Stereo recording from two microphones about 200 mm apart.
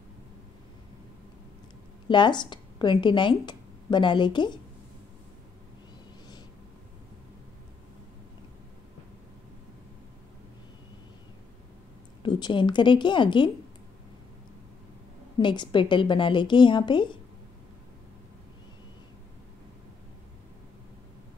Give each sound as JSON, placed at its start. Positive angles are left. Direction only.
{"t": 2.0, "sound": "speech", "side_deg": 20}
{"t": 12.2, "sound": "a woman's voice", "side_deg": 20}
{"t": 15.3, "sound": "a woman's voice", "side_deg": 20}